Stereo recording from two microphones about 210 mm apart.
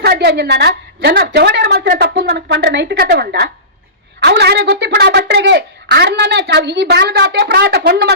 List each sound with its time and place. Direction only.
0.0 s a woman's voice: 50° right (ahead or behind)